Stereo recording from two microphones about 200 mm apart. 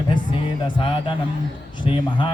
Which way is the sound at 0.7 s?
25° left (ahead or behind).